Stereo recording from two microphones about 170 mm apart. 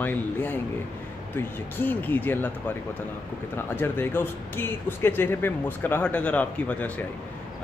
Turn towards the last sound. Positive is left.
turn(degrees=10)  # may be behind; listen again after turning